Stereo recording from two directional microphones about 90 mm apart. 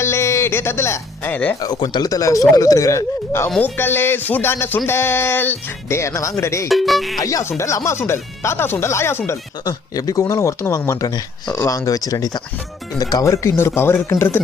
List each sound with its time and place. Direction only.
0.0 s speech: 30° left (ahead or behind)
1.6 s speech: 55° left (ahead or behind); by 6.7 s 35° left (ahead or behind)
6.7 s speech: centre (ahead or behind)
7.2 s speech: 40° left (ahead or behind)
9.6 s speech: 40° left (ahead or behind); by 14.4 s 20° left (ahead or behind)